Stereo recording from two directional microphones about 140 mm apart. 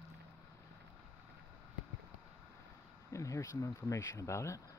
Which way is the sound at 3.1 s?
20° left (ahead or behind).